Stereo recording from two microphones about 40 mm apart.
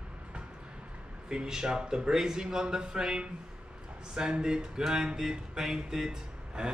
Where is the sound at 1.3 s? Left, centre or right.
Centre.